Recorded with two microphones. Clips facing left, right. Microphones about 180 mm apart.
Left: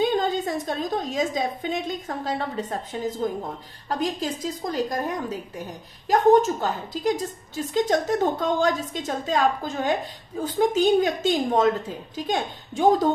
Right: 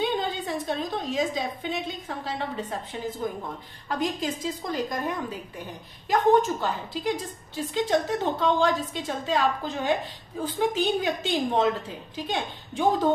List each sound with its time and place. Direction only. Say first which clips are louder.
0.0 s a woman's voice: left 5 dB; 45° left (ahead or behind)